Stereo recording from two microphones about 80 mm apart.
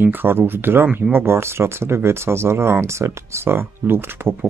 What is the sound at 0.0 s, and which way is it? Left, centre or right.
Speech, right.